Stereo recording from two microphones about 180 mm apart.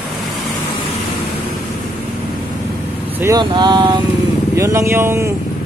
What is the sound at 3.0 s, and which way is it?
Vehicle, 10° right (ahead or behind).